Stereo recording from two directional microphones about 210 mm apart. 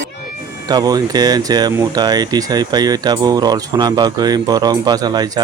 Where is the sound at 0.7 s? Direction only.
20° right (ahead or behind).